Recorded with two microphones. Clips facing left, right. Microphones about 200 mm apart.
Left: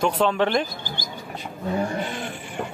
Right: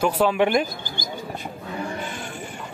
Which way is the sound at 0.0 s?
5° right (ahead or behind).